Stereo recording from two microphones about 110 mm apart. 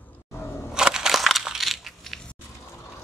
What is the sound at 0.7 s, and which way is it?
Crushing, 5° right (ahead or behind).